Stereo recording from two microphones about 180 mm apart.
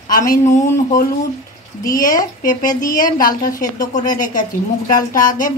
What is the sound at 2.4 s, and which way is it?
A woman's voice, 45° left (ahead or behind).